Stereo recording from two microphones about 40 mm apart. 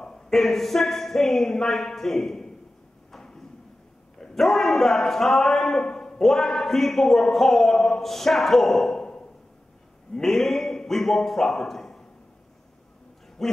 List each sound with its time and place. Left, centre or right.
0.0 s a man's voice: centre
3.1 s a sound: centre
4.2 s a man's voice: centre
8.9 s a sound: centre
10.1 s a man's voice: centre
13.4 s speech: centre